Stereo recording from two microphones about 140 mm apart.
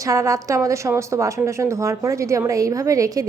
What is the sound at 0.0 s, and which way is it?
Speech, 25° right (ahead or behind).